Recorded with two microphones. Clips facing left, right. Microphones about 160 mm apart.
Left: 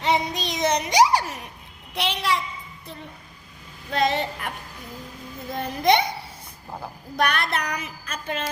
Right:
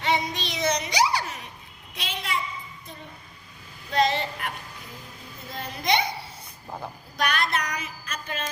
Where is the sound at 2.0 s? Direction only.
75° left (ahead or behind).